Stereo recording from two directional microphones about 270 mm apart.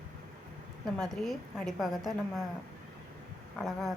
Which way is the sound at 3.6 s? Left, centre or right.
Centre.